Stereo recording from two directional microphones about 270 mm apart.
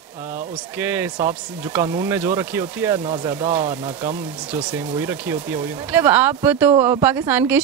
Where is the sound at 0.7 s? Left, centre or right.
Centre.